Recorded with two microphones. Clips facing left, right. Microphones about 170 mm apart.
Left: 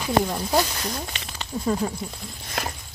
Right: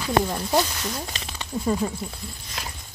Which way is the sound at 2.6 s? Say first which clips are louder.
Left 7 dB; 55° left (ahead or behind).